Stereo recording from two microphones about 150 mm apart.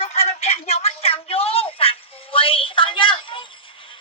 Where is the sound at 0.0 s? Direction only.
40° left (ahead or behind).